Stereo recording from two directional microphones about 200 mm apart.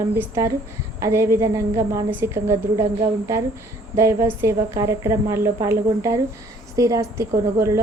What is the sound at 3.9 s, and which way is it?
A woman's voice, 15° right (ahead or behind).